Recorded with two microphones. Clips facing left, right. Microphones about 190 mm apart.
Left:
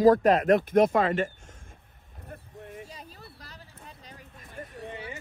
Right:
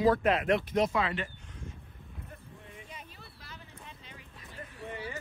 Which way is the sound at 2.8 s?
35° left (ahead or behind).